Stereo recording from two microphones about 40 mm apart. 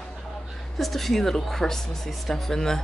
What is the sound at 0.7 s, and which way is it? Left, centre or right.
A woman's voice, centre.